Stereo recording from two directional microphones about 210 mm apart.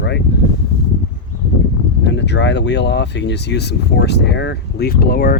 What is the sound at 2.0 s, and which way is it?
Speech, 55° left (ahead or behind).